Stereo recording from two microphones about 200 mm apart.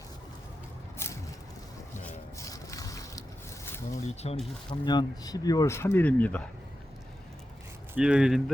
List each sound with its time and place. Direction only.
2.0 s a sound: 15° left (ahead or behind)
3.9 s speech: 30° left (ahead or behind)
4.7 s speech: 20° left (ahead or behind)
7.9 s speech: 5° right (ahead or behind)